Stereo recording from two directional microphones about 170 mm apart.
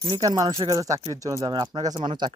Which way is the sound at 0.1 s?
20° right (ahead or behind).